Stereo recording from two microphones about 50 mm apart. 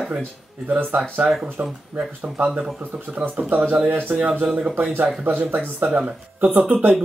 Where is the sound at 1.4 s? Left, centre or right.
Right.